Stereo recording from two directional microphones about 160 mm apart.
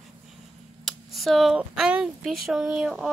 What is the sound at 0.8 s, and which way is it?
Speech, centre (ahead or behind).